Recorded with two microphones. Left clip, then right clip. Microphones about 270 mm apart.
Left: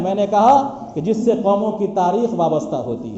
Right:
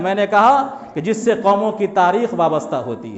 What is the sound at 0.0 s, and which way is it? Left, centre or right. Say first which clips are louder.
A man's voice: right 1 dB; right.